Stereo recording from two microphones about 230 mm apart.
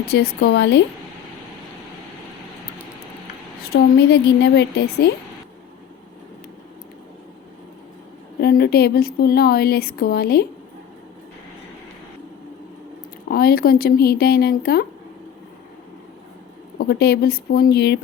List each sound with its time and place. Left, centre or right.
0.1 s speech: left
3.6 s speech: left
8.4 s speech: left
13.2 s speech: left
16.7 s speech: left